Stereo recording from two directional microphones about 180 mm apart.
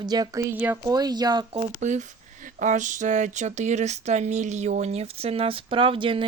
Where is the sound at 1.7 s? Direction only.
40° right (ahead or behind).